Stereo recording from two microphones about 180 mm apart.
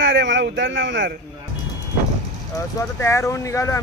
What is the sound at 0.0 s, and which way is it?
A man's voice, 85° right.